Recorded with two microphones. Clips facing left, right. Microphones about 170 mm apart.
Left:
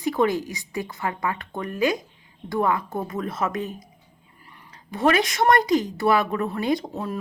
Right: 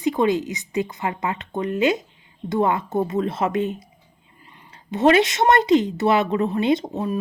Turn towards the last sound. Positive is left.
turn(degrees=-20)  # may be behind; listen again after turning